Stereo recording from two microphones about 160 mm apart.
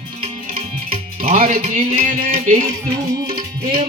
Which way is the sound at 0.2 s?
35° right (ahead or behind).